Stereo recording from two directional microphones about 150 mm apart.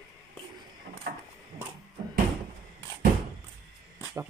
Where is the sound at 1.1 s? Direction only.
90° right.